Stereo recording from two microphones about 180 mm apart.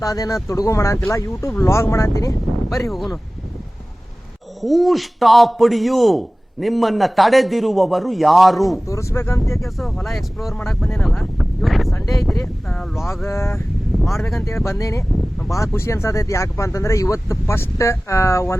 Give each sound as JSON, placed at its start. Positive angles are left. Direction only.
{"t": 0.0, "sound": "speech", "side_deg": 20}
{"t": 2.6, "sound": "a man's voice", "side_deg": 0}
{"t": 4.6, "sound": "a man's voice", "side_deg": 0}
{"t": 8.9, "sound": "speech", "side_deg": 15}
{"t": 9.6, "sound": "a man's voice", "side_deg": 0}
{"t": 13.2, "sound": "speech", "side_deg": 15}
{"t": 14.0, "sound": "a man's voice", "side_deg": 0}
{"t": 14.4, "sound": "speech", "side_deg": 15}